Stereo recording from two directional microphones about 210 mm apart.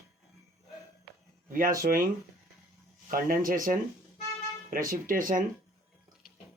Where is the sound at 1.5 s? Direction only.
40° right (ahead or behind).